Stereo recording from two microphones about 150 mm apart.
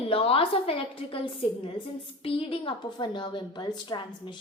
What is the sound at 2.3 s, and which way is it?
A woman's voice, 35° left (ahead or behind).